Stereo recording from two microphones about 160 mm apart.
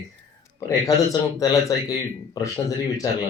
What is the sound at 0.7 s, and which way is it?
Speech, 20° left (ahead or behind).